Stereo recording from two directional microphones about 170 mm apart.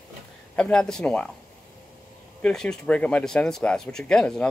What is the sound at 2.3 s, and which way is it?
Speech, 5° left (ahead or behind).